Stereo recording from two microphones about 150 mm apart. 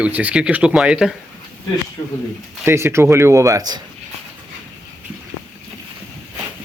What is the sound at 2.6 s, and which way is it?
Speech, 15° right (ahead or behind).